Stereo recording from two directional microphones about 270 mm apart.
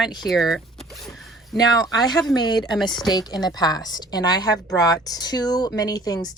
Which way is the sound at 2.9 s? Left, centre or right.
Centre.